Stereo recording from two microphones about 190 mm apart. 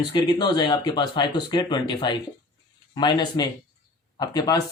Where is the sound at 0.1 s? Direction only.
25° left (ahead or behind).